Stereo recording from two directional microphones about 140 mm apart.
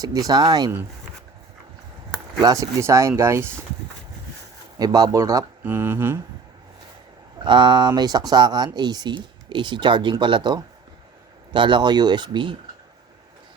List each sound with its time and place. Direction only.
0.0 s speech: 25° right (ahead or behind)
2.4 s speech: 25° right (ahead or behind)
4.8 s speech: 25° right (ahead or behind)
7.4 s speech: 35° right (ahead or behind)